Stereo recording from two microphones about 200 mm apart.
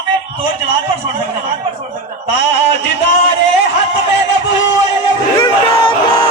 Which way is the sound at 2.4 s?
60° left (ahead or behind).